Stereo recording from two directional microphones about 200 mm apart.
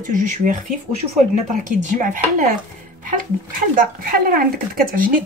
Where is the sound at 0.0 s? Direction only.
40° right (ahead or behind).